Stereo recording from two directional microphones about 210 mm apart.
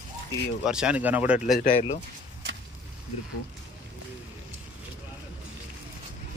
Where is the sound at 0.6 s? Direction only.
5° right (ahead or behind).